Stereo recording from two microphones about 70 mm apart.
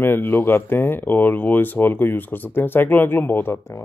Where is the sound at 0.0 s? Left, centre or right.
Left.